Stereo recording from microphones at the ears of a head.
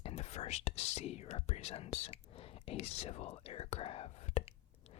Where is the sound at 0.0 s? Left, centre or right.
Left.